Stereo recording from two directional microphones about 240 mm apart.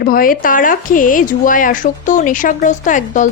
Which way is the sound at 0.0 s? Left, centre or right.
Left.